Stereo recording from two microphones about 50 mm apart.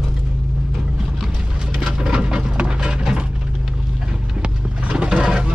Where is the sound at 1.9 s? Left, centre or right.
Centre.